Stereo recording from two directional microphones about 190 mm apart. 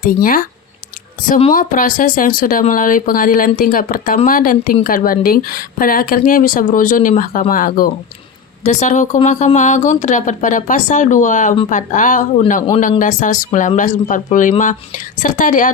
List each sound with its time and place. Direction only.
0.0 s a woman's voice: 50° left (ahead or behind)
1.5 s a woman's voice: 45° left (ahead or behind)